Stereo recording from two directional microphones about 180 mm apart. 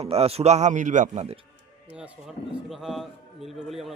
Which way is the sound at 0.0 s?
35° right (ahead or behind).